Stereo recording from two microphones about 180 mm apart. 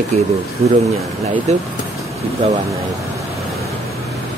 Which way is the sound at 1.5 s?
40° right (ahead or behind).